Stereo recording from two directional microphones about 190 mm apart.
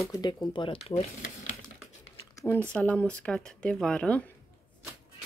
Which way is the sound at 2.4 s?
10° left (ahead or behind).